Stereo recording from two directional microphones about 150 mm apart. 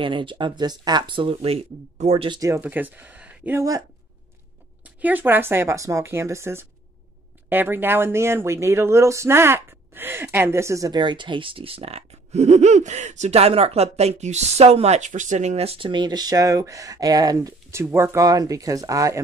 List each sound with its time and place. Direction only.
0.0 s speech: 35° right (ahead or behind)
2.6 s speech: 10° right (ahead or behind)
4.8 s speech: 10° right (ahead or behind)